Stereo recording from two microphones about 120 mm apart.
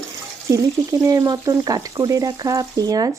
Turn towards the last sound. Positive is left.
turn(degrees=-30)  # may be behind; listen again after turning